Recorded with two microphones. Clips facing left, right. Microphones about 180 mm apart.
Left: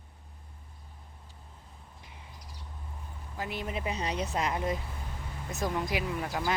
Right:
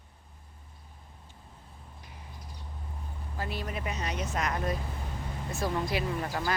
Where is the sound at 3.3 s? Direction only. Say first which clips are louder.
Left 1 dB; 15° left (ahead or behind).